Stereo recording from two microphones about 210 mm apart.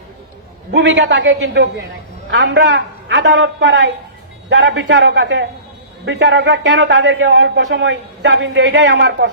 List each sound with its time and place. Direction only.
0.7 s a man's voice: 60° right (ahead or behind)